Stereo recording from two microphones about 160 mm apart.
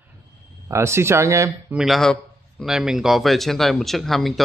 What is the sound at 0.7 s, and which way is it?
Speech, 15° right (ahead or behind).